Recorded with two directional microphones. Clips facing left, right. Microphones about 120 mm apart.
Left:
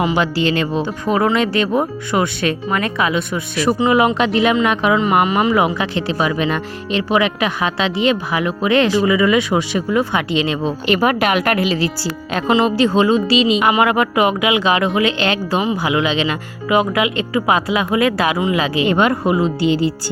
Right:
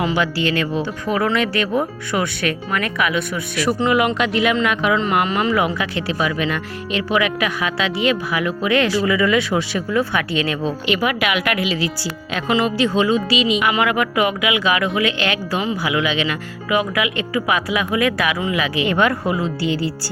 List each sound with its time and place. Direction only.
0.0 s speech: 20° left (ahead or behind)
4.9 s speech: 15° left (ahead or behind)
10.8 s speech: 45° left (ahead or behind)
12.5 s speech: 25° left (ahead or behind)